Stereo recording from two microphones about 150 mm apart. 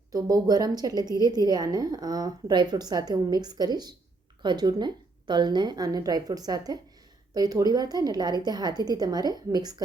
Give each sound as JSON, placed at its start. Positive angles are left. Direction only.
{"t": 0.1, "sound": "a woman's voice", "side_deg": -25}